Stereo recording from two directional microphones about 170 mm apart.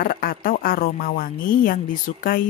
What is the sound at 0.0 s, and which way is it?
Speech, 60° left (ahead or behind).